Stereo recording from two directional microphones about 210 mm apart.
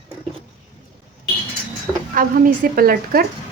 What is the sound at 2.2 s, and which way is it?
Speech, 45° right (ahead or behind).